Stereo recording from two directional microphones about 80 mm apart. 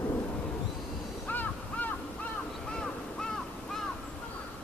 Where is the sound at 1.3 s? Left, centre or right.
Left.